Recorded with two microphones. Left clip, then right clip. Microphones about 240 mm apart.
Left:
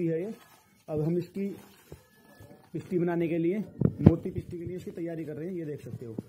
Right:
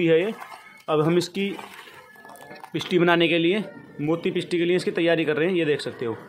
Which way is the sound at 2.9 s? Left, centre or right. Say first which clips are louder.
Right 10 dB; centre.